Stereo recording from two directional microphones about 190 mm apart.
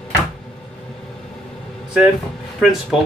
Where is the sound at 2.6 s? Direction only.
Centre (ahead or behind).